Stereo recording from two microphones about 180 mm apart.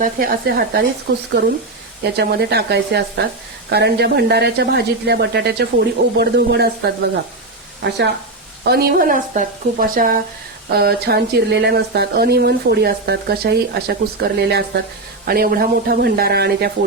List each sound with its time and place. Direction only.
0.0 s speech: 55° right (ahead or behind)
1.1 s speech: 75° right (ahead or behind)
7.8 s speech: 70° right (ahead or behind)
8.6 s speech: 60° right (ahead or behind)